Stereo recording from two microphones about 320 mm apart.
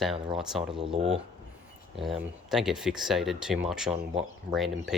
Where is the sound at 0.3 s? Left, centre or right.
Centre.